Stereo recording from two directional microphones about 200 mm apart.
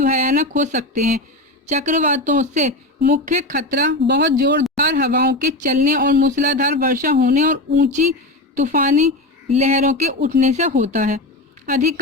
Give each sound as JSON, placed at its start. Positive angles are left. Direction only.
{"t": 0.0, "sound": "speech", "side_deg": -40}